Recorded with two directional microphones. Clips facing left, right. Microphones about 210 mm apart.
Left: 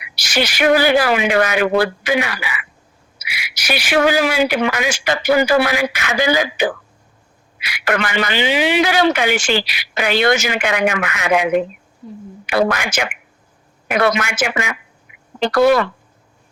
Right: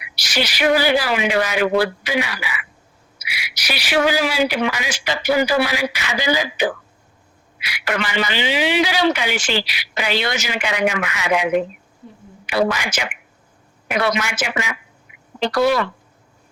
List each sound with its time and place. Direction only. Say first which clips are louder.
0.2 s speech: left 3 dB; 50° left (ahead or behind)
12.5 s speech: left 2 dB; 55° left (ahead or behind)